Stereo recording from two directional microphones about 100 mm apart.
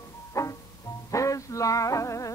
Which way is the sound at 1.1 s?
30° left (ahead or behind).